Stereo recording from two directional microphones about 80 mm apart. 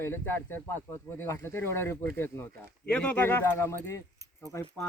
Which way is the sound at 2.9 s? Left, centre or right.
Centre.